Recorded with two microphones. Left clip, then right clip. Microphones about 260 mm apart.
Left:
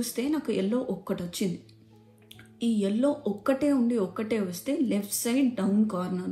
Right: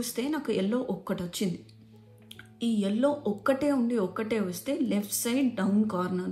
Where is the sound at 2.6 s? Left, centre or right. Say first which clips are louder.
Left 1 dB; right.